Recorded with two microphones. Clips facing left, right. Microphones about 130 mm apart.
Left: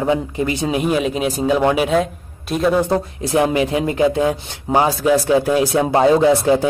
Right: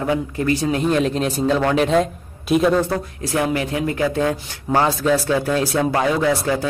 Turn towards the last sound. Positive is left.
turn(degrees=20)  # may be behind; listen again after turning